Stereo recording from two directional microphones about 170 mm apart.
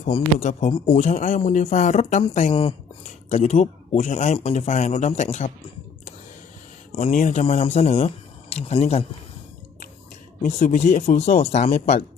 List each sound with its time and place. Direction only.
0.0 s speech: 40° left (ahead or behind)
3.2 s speech: 45° left (ahead or behind)
7.0 s speech: 50° left (ahead or behind)
7.4 s speech: 40° left (ahead or behind)
10.6 s speech: 40° left (ahead or behind)